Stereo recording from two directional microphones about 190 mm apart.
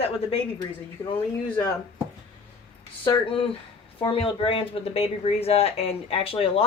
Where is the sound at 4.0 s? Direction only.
30° left (ahead or behind).